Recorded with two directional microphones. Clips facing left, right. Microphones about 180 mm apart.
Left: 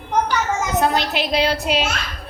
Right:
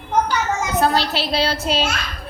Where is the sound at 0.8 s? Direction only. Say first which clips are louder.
Right 1 dB; 15° left (ahead or behind).